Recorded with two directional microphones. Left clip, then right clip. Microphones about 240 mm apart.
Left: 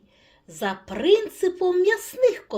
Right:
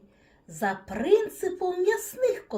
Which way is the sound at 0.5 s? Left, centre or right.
Left.